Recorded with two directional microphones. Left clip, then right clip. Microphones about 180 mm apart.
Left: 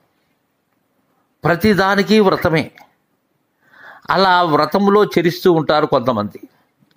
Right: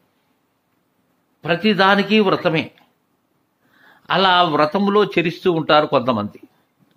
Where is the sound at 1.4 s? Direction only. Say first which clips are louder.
Left 1 dB; 35° left (ahead or behind).